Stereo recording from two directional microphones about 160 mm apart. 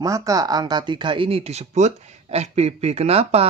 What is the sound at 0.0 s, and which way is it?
Speech, 20° right (ahead or behind).